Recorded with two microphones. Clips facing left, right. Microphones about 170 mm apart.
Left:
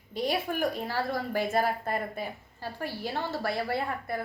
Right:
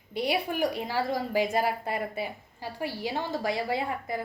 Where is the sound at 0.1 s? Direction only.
10° right (ahead or behind).